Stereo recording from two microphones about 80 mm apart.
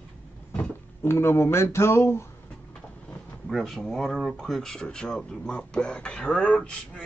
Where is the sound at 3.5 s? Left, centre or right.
Centre.